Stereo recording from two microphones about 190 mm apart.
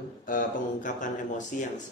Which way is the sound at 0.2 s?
45° left (ahead or behind).